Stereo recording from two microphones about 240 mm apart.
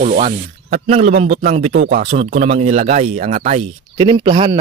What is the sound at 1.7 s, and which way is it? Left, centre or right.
Speech, right.